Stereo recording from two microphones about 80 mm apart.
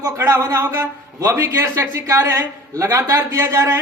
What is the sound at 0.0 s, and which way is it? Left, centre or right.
A man's voice, right.